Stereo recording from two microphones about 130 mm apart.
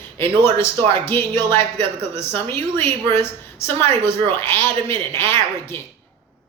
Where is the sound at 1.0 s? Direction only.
20° left (ahead or behind).